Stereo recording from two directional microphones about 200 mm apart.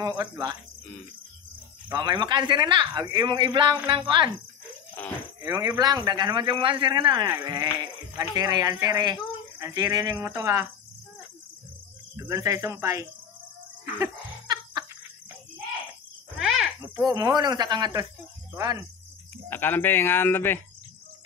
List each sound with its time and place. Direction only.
0.0 s speech: 20° right (ahead or behind)
1.9 s speech: 20° right (ahead or behind)
5.4 s speech: 20° right (ahead or behind)
12.2 s speech: 15° right (ahead or behind)
14.0 s laughter: 20° right (ahead or behind)
16.3 s insect: centre (ahead or behind)
16.9 s speech: 20° right (ahead or behind)
19.5 s speech: 10° left (ahead or behind)